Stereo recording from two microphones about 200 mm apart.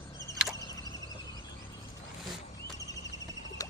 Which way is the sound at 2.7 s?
20° left (ahead or behind).